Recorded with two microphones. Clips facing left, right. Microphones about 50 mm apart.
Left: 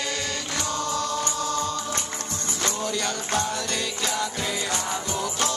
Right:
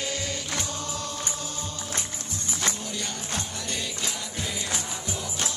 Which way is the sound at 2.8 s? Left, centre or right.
Left.